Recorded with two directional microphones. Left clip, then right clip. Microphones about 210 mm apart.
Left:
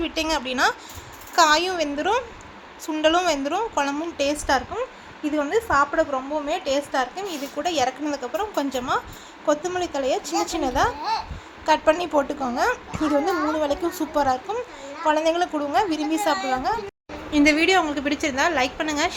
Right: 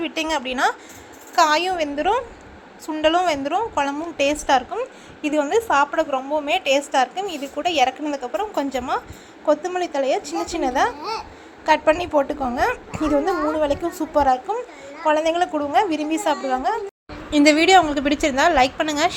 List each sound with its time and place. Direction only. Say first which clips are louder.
0.0 s a woman's voice: right 1 dB; 10° right (ahead or behind)